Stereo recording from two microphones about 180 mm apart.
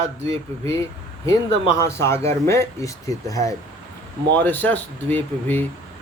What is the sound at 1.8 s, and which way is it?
Speech, 15° left (ahead or behind).